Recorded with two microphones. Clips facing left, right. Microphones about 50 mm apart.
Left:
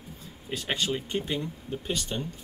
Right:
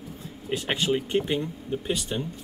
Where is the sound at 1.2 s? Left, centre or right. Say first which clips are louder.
Right 5 dB; right.